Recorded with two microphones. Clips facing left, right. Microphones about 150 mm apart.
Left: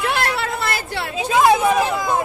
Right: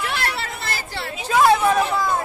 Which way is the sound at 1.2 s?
15° left (ahead or behind).